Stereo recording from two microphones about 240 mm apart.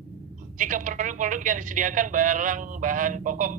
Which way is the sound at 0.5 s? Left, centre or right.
Right.